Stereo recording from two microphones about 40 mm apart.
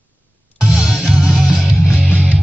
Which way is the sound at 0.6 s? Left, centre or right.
Right.